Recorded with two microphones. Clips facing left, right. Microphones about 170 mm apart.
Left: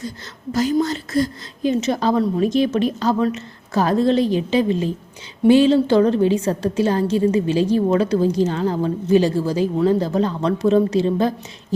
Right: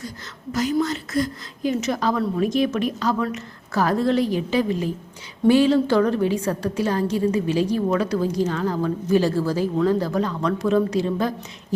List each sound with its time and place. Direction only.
0.5 s a woman's voice: 30° left (ahead or behind)